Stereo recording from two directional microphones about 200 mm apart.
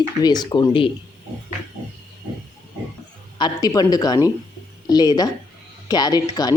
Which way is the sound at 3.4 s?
20° left (ahead or behind).